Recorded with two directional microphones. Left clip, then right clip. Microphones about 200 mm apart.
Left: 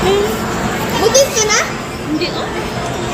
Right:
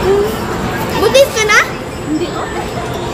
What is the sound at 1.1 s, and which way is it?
Children playing, 25° right (ahead or behind).